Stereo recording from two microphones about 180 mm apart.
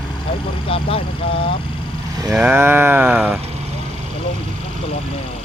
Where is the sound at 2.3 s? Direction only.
5° right (ahead or behind).